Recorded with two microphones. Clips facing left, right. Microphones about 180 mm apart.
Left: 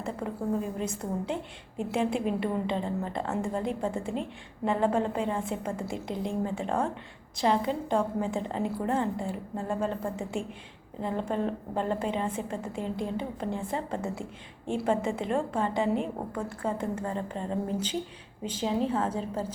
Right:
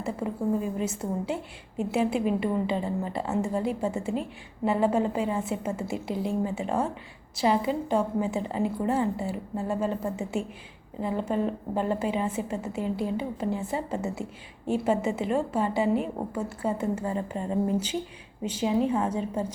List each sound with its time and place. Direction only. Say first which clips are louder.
0.8 s a woman's voice: right 2 dB; 5° right (ahead or behind)